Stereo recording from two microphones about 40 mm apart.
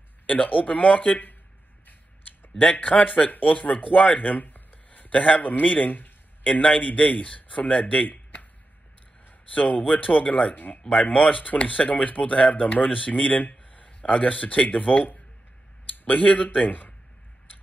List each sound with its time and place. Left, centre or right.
0.3 s speech: left
2.6 s speech: left
6.7 s speech: left
9.5 s speech: left
10.5 s speech: left
10.9 s speech: left